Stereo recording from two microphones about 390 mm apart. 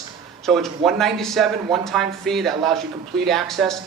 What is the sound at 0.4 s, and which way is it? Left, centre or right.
Speech, centre.